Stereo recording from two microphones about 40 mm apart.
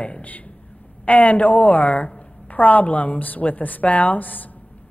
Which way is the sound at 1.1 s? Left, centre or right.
Left.